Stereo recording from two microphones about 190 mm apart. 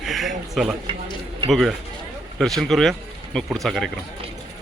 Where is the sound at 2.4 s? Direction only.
Centre (ahead or behind).